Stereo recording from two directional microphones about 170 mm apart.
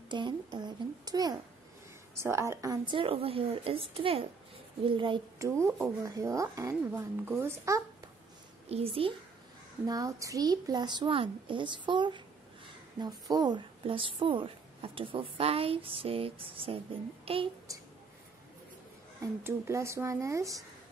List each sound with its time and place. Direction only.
0.1 s a sound: 25° right (ahead or behind)
2.1 s a woman's voice: 15° right (ahead or behind)
5.5 s speech: 15° right (ahead or behind)
8.6 s a woman's voice: 35° right (ahead or behind)
9.8 s a child's voice: 20° right (ahead or behind)
19.4 s speech: 15° right (ahead or behind)